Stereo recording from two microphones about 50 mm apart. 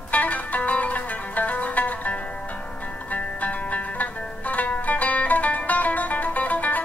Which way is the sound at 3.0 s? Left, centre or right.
Left.